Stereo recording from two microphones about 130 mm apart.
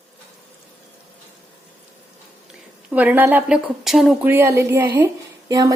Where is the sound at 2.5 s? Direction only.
10° right (ahead or behind).